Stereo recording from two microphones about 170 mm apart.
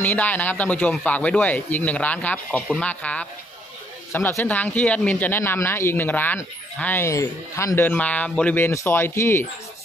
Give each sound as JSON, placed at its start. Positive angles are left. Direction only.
{"t": 0.0, "sound": "speech", "side_deg": 10}